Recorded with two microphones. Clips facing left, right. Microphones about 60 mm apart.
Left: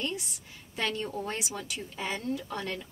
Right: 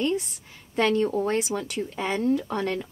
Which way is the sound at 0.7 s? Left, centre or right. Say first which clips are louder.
Right 10 dB; right.